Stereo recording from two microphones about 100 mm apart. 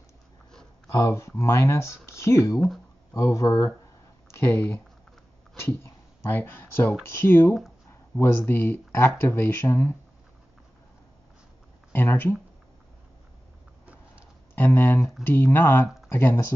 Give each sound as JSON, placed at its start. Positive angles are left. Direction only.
{"t": 0.9, "sound": "speech", "side_deg": 30}
{"t": 11.9, "sound": "speech", "side_deg": 20}
{"t": 14.5, "sound": "speech", "side_deg": 25}